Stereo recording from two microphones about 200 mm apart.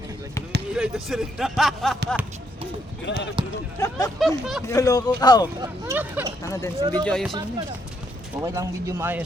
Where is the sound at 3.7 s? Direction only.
15° left (ahead or behind).